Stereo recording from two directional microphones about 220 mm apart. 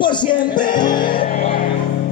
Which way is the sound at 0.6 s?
20° left (ahead or behind).